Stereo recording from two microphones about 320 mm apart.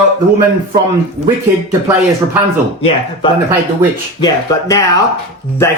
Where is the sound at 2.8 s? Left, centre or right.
Centre.